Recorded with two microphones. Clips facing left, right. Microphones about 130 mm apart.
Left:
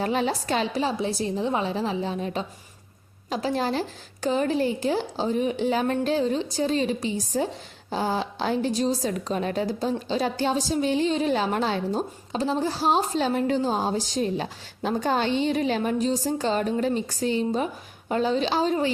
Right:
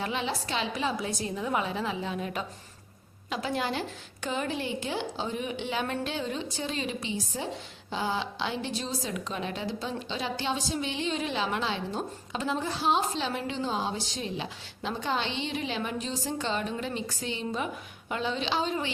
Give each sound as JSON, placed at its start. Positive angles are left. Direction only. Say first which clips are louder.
{"t": 0.0, "sound": "a woman's voice", "louder": "left 7 dB", "side_deg": 40}